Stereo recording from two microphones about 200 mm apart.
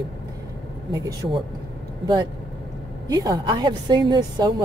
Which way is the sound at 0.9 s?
20° right (ahead or behind).